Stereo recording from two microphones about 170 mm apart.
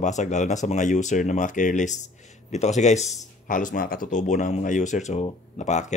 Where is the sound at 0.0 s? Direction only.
45° left (ahead or behind).